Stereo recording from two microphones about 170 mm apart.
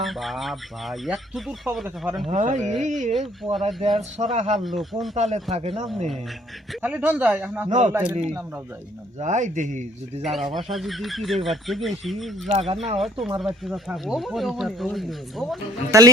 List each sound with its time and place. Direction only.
0.0 s speech: centre (ahead or behind)
2.2 s speech: 45° right (ahead or behind)
3.8 s a man's voice: 30° right (ahead or behind)
4.2 s speech: 40° right (ahead or behind)
4.6 s speech: centre (ahead or behind)
5.1 s a man's voice: 40° right (ahead or behind)
6.8 s speech: 10° right (ahead or behind)
7.7 s a man's voice: 45° right (ahead or behind)
10.3 s speech: centre (ahead or behind)
12.5 s a man's voice: 40° right (ahead or behind)
13.0 s speech: 5° right (ahead or behind)
15.9 s a man's voice: 20° right (ahead or behind)